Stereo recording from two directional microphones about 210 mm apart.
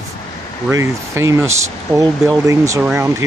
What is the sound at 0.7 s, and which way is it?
Speech, 15° right (ahead or behind).